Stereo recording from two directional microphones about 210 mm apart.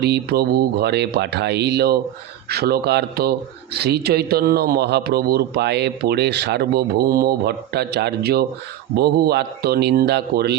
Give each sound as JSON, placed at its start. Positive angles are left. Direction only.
{"t": 0.0, "sound": "speech", "side_deg": -50}